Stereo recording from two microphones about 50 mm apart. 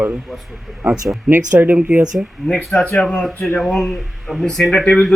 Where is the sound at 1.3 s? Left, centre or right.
Right.